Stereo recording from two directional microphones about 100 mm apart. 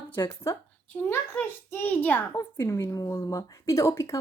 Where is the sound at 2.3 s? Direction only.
30° left (ahead or behind).